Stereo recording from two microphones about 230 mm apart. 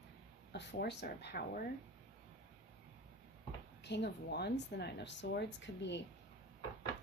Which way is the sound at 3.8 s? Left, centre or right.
Left.